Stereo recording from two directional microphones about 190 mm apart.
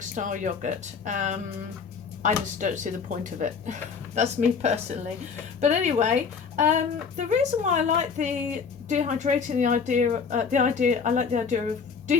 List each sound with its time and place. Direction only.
0.0 s speech: 40° right (ahead or behind)
2.6 s speech: 40° right (ahead or behind)